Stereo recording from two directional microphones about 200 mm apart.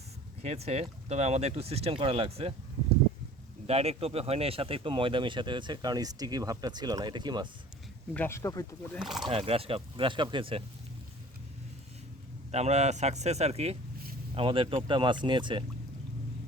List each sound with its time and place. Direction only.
0.4 s speech: 30° right (ahead or behind)
3.7 s speech: 30° right (ahead or behind)
8.1 s speech: 10° left (ahead or behind)
9.0 s speech: centre (ahead or behind)
9.2 s speech: 25° right (ahead or behind)
12.5 s speech: 35° right (ahead or behind)